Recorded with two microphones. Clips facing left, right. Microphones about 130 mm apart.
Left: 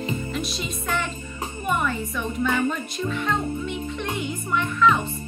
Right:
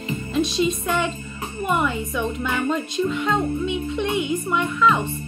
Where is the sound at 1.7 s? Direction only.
15° right (ahead or behind).